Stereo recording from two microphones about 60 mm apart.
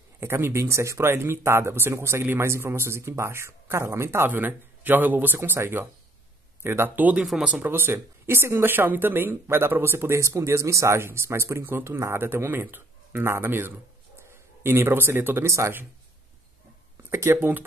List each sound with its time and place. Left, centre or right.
0.2 s speech: right
4.3 s speech: right
11.0 s speech: right
17.1 s speech: right
17.4 s speech: right